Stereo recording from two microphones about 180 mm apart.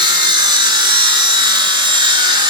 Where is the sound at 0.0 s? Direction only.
25° right (ahead or behind).